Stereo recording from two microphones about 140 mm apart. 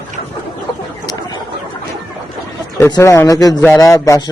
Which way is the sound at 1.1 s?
30° left (ahead or behind).